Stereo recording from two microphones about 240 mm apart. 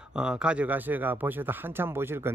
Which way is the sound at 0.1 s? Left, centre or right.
Centre.